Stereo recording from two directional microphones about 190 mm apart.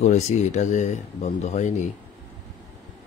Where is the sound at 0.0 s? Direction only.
40° left (ahead or behind).